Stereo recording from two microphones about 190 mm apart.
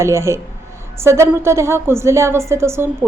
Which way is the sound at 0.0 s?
15° right (ahead or behind).